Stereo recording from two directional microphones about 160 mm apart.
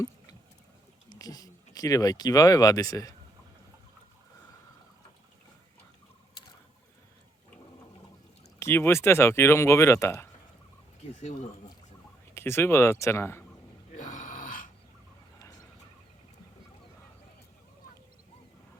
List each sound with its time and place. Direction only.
1.1 s speech: 20° left (ahead or behind)
8.5 s speech: 15° left (ahead or behind)
12.3 s speech: 15° left (ahead or behind)
13.9 s a sound: 55° left (ahead or behind)